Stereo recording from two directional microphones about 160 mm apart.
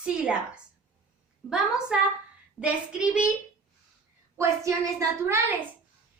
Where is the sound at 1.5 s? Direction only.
5° right (ahead or behind).